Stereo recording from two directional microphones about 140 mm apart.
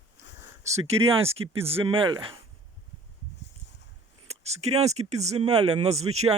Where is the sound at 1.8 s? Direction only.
35° right (ahead or behind).